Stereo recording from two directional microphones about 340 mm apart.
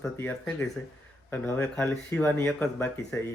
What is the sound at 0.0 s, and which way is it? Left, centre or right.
A man's voice, centre.